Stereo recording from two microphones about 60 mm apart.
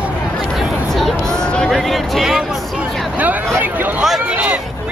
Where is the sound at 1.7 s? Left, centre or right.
Centre.